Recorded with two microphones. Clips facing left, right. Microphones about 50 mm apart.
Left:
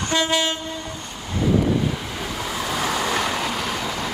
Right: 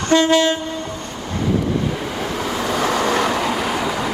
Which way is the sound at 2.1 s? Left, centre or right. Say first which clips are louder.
Right 5 dB; right.